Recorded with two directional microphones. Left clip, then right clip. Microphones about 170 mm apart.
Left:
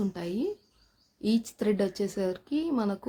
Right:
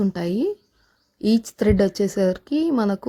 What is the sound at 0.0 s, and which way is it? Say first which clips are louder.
Speech: right 9 dB; 40° right (ahead or behind).